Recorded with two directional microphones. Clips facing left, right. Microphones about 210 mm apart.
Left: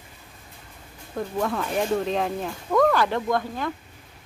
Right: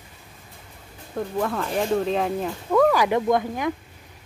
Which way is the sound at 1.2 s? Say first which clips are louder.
Right 1 dB; centre (ahead or behind).